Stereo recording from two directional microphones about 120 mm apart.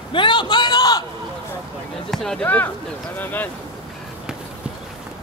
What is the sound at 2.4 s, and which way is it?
Speech, 15° left (ahead or behind).